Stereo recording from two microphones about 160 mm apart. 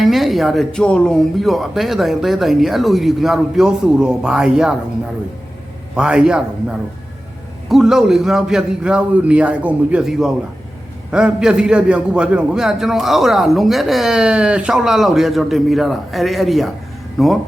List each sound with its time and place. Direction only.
0.0 s a man's voice: centre (ahead or behind)
6.0 s a man's voice: 5° right (ahead or behind)